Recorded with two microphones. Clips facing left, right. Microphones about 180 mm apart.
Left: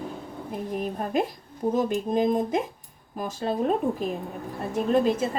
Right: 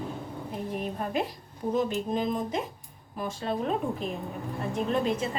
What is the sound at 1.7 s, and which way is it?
A woman's voice, 50° left (ahead or behind).